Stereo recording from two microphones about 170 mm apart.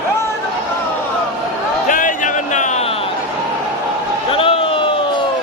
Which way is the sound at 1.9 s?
50° left (ahead or behind).